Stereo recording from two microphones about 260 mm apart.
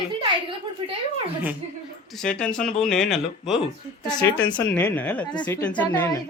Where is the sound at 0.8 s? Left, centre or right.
Centre.